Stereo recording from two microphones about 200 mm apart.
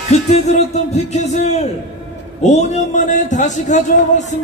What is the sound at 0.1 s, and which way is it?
A man's voice, 35° left (ahead or behind).